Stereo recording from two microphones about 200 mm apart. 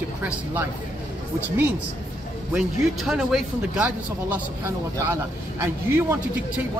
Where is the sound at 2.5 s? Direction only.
Centre (ahead or behind).